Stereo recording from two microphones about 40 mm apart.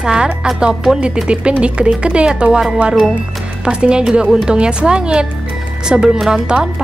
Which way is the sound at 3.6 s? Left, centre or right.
Right.